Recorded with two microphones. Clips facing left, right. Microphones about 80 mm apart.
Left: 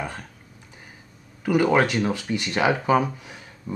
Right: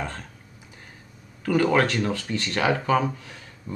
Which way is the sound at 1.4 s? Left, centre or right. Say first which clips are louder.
Left 1 dB; centre.